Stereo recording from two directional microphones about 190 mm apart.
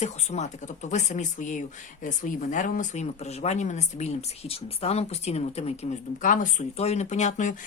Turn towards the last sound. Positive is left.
turn(degrees=40)  # may be behind; listen again after turning